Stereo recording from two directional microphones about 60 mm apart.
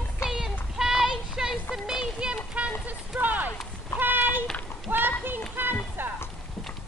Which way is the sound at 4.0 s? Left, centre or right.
Right.